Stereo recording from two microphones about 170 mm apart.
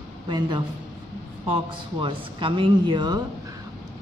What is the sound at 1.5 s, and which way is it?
Speech, 30° right (ahead or behind).